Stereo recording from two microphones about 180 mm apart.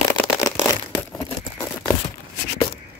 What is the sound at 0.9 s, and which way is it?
Crumpling, 15° left (ahead or behind).